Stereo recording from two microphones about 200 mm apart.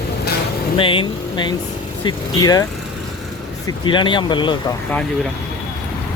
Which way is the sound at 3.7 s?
25° left (ahead or behind).